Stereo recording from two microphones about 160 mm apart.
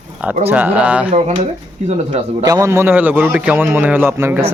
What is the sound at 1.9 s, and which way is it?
Speech, 45° right (ahead or behind).